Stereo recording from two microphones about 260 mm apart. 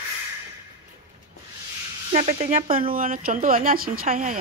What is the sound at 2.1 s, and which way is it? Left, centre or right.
Speech, right.